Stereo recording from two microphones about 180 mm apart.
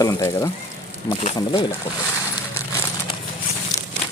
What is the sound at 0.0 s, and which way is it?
Speech, 20° left (ahead or behind).